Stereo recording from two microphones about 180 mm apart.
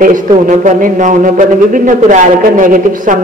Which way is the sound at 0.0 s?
45° right (ahead or behind).